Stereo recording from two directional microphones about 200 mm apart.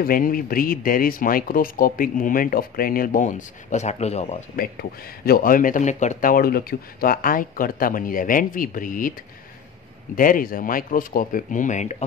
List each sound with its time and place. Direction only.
0.0 s speech: 45° left (ahead or behind)
4.6 s speech: 50° left (ahead or behind)
10.1 s speech: 45° left (ahead or behind)